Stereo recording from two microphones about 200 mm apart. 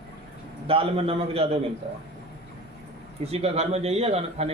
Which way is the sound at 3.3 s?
30° right (ahead or behind).